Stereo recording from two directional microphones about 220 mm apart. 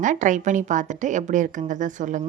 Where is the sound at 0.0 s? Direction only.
35° right (ahead or behind).